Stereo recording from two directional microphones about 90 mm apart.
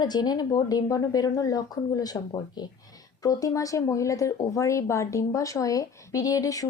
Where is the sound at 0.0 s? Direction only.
50° left (ahead or behind).